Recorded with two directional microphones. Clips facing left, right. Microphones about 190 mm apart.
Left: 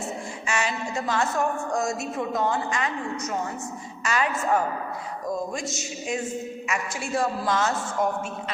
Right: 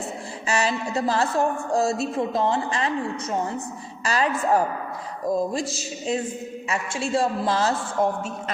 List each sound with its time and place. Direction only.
0.4 s a man's voice: 35° right (ahead or behind)